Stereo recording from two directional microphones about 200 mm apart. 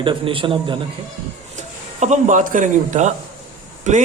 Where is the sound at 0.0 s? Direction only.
25° right (ahead or behind).